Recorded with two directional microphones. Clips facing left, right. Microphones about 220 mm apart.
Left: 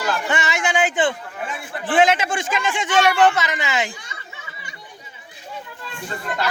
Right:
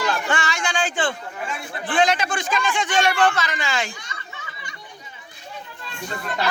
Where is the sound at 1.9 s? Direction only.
25° left (ahead or behind).